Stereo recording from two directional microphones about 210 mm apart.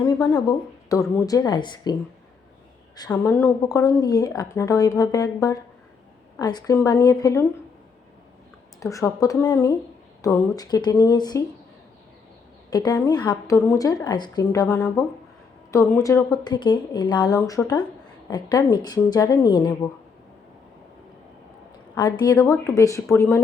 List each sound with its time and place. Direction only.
0.0 s a woman's voice: 15° left (ahead or behind)
8.8 s a woman's voice: 15° left (ahead or behind)
12.7 s a woman's voice: 20° left (ahead or behind)
21.9 s a woman's voice: 20° left (ahead or behind)